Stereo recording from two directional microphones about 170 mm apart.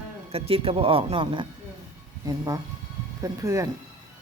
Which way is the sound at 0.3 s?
35° right (ahead or behind).